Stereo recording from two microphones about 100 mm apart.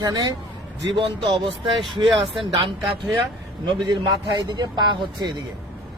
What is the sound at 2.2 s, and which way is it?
Speech, centre (ahead or behind).